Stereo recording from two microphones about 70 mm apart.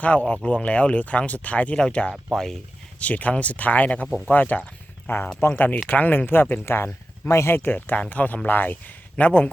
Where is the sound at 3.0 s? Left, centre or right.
Left.